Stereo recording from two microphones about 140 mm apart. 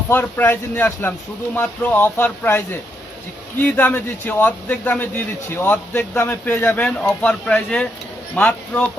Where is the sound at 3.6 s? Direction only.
15° left (ahead or behind).